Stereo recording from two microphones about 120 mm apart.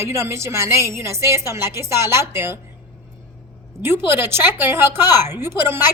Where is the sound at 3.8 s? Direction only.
20° right (ahead or behind).